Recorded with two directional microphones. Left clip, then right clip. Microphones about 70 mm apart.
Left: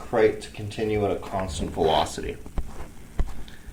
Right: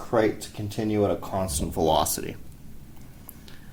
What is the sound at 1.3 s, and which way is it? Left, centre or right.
Speech, centre.